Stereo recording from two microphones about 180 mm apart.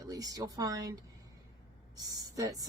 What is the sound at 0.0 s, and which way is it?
Speech, 20° right (ahead or behind).